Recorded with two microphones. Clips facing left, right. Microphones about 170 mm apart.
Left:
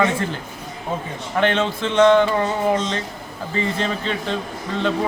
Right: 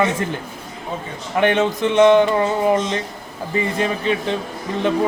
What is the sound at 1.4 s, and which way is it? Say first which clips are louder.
Speech: right 3 dB; 15° right (ahead or behind).